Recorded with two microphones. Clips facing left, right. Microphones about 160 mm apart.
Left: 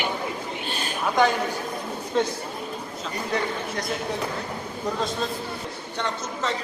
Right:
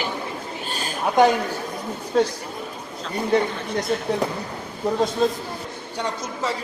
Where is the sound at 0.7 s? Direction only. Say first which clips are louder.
Right 4 dB; 40° right (ahead or behind).